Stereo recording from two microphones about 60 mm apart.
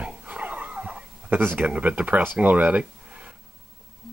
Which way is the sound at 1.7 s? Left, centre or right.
Right.